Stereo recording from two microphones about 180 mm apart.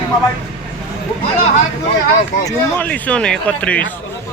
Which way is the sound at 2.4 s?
20° left (ahead or behind).